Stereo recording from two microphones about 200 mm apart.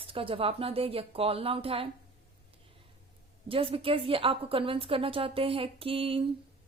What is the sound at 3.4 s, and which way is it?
A woman's voice, 25° right (ahead or behind).